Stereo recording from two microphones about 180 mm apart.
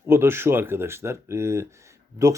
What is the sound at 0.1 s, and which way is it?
A man's voice, 15° right (ahead or behind).